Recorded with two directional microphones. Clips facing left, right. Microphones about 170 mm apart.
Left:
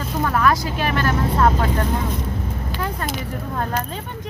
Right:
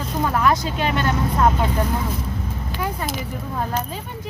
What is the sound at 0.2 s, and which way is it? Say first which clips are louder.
Speech: even; 20° right (ahead or behind).